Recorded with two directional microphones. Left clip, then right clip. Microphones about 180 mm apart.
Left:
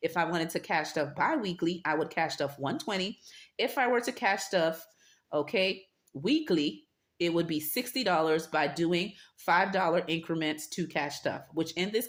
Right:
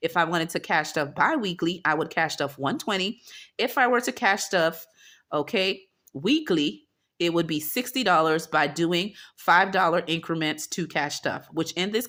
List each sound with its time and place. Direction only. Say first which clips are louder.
0.0 s speech: right 6 dB; 45° right (ahead or behind)